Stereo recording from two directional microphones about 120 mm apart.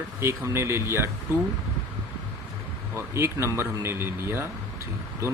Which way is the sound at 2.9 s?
20° right (ahead or behind).